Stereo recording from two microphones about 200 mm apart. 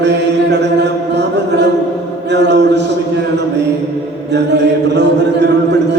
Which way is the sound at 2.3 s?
60° right (ahead or behind).